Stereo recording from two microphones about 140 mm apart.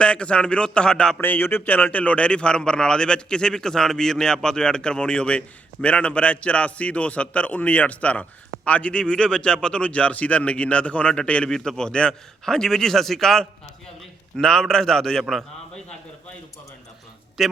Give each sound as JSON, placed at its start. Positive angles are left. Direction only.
{"t": 0.0, "sound": "a man's voice", "side_deg": 5}
{"t": 17.4, "sound": "a man's voice", "side_deg": 0}